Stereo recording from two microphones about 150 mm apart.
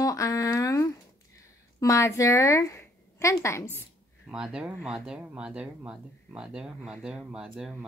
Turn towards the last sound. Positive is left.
turn(degrees=-5)  # may be behind; listen again after turning